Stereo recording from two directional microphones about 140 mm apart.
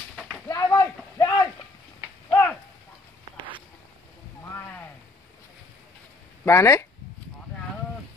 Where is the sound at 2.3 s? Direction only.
15° left (ahead or behind).